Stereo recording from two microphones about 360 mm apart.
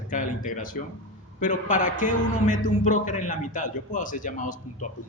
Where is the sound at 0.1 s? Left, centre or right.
Left.